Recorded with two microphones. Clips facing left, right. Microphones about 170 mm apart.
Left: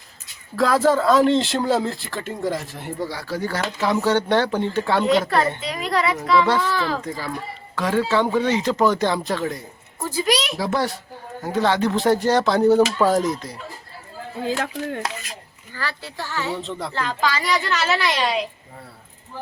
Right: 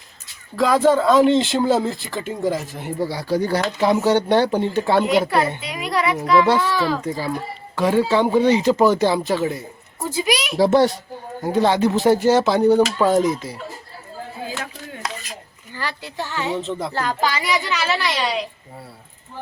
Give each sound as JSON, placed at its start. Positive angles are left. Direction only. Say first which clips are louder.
{"t": 0.5, "sound": "speech", "louder": "right 2 dB", "side_deg": 0}
{"t": 3.1, "sound": "speech", "louder": "right 6 dB", "side_deg": -15}
{"t": 10.6, "sound": "a child's voice", "louder": "right 8 dB", "side_deg": -25}
{"t": 11.3, "sound": "speech", "louder": "right 3 dB", "side_deg": -10}
{"t": 15.7, "sound": "speech", "louder": "right 1 dB", "side_deg": -15}
{"t": 16.6, "sound": "speech", "louder": "right 4 dB", "side_deg": -5}
{"t": 16.9, "sound": "speech", "louder": "even", "side_deg": -35}
{"t": 17.4, "sound": "speech", "louder": "even", "side_deg": -5}